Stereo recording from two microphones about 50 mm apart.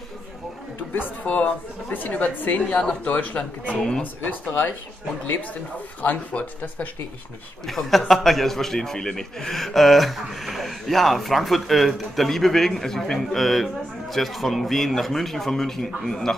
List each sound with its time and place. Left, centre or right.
1.2 s a woman's voice: left
3.3 s speech: left
4.0 s a woman's voice: left
6.0 s a woman's voice: left
7.6 s a man's voice: centre